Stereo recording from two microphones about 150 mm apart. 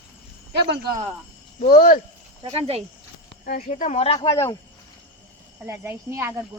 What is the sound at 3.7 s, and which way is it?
Speech, 45° left (ahead or behind).